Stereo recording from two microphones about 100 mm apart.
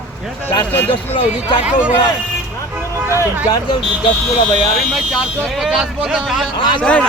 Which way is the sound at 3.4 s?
45° left (ahead or behind).